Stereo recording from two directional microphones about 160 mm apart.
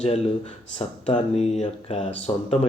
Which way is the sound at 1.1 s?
45° left (ahead or behind).